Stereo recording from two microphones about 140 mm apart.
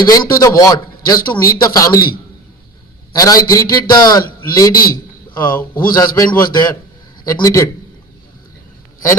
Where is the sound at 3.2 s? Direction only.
25° left (ahead or behind).